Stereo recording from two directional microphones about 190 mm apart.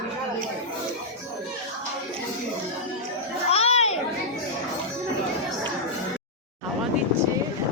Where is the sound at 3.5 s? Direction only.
35° left (ahead or behind).